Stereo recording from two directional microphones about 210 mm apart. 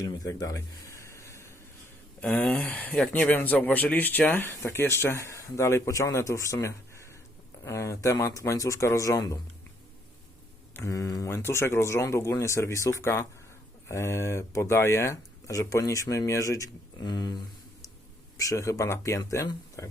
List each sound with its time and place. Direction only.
0.0 s a sound: 15° left (ahead or behind)
2.2 s speech: 5° left (ahead or behind)
10.8 s speech: 15° left (ahead or behind)